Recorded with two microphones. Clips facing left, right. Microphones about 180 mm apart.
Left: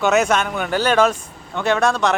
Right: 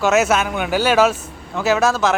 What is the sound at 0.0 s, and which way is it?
A man's voice, 5° right (ahead or behind).